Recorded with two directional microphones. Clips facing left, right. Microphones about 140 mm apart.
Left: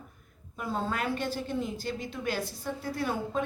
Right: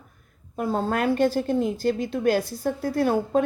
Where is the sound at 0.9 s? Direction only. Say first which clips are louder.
Right 10 dB; 45° right (ahead or behind).